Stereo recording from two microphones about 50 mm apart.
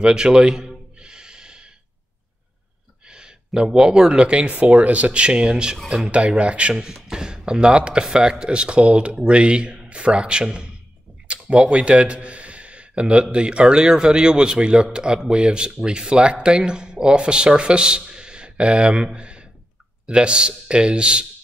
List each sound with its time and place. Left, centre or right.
0.0 s a man's voice: centre
0.9 s snort: centre
3.1 s speech: centre
6.7 s a man's voice: centre
19.1 s a sound: right
20.1 s speech: centre